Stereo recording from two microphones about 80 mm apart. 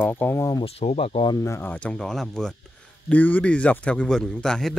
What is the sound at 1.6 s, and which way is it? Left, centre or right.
Speech, centre.